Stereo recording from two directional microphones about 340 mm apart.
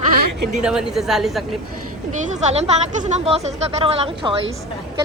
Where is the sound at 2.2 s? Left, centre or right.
Centre.